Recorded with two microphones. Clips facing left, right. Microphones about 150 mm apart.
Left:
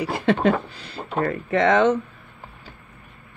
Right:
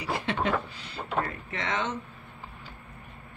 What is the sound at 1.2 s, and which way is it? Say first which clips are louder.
Speech: left 15 dB; 60° left (ahead or behind).